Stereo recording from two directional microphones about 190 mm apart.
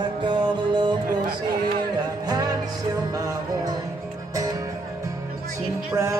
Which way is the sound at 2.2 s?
20° right (ahead or behind).